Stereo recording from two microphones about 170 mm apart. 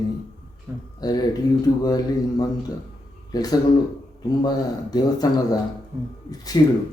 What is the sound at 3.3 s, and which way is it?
Speech, 20° left (ahead or behind).